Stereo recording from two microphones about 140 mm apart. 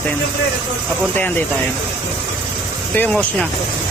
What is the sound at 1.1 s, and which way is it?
Speech, 15° left (ahead or behind).